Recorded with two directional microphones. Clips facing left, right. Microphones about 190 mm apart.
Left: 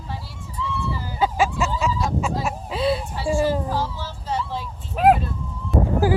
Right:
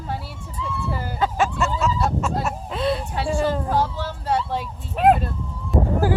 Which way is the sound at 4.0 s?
60° right (ahead or behind).